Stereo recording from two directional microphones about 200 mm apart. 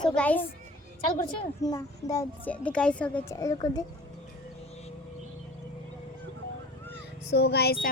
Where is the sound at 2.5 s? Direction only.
5° left (ahead or behind).